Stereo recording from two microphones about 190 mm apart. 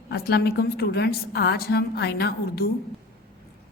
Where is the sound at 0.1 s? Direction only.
55° left (ahead or behind).